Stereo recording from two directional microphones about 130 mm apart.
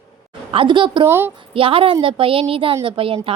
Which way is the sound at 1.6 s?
45° right (ahead or behind).